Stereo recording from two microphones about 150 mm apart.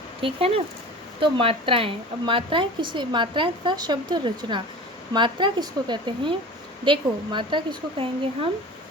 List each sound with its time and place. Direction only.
0.2 s a woman's voice: 40° right (ahead or behind)